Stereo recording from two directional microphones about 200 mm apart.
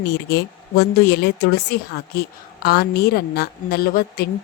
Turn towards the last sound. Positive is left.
turn(degrees=50)  # may be behind; listen again after turning